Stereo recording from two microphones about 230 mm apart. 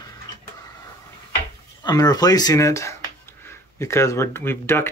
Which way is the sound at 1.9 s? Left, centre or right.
Centre.